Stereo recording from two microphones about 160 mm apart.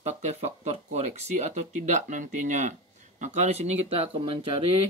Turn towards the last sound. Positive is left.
turn(degrees=-35)  # may be behind; listen again after turning